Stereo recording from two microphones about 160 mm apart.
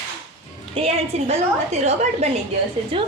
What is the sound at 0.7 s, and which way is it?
A woman's voice, 40° right (ahead or behind).